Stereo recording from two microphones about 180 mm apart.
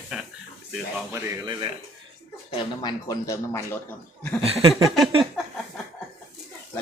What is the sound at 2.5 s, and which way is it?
Speech, 20° left (ahead or behind).